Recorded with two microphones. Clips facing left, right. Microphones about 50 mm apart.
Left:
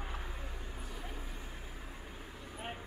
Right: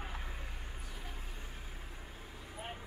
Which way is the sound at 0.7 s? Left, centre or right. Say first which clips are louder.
Left 3 dB; left.